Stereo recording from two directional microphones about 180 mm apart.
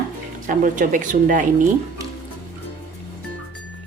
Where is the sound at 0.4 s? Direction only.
45° right (ahead or behind).